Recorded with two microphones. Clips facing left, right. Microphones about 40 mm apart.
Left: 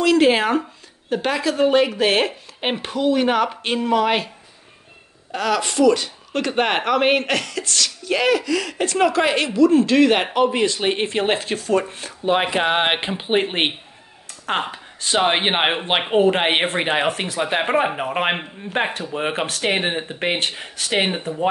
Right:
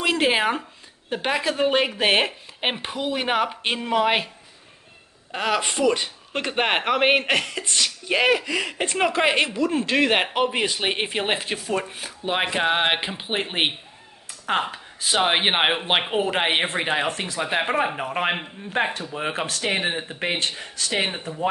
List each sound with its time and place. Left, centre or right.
0.0 s speech: centre
5.3 s speech: right; by 12.5 s centre
12.5 s speech: centre